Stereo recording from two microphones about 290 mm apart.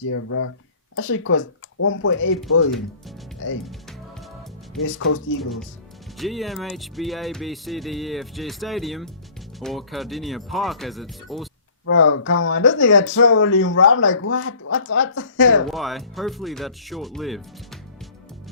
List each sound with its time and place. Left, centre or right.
0.0 s speech: left
3.6 s speech: centre
4.8 s speech: left
5.4 s speech: centre
11.9 s speech: left
15.7 s speech: centre